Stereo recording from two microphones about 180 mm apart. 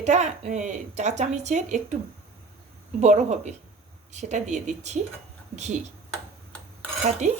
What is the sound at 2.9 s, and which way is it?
Speech, 40° right (ahead or behind).